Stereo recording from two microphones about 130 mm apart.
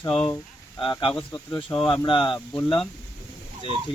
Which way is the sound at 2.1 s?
40° left (ahead or behind).